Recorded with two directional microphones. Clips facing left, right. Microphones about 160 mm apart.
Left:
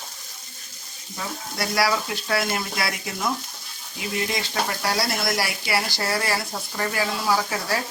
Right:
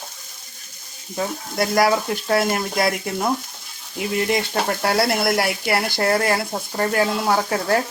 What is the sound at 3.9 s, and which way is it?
Speech, 55° right (ahead or behind).